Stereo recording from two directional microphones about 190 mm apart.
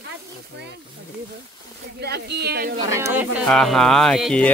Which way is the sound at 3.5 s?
Centre (ahead or behind).